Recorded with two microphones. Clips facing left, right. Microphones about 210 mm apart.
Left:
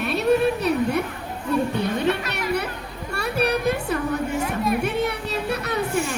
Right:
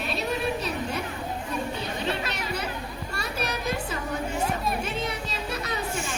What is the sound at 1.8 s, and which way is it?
Music, 60° left (ahead or behind).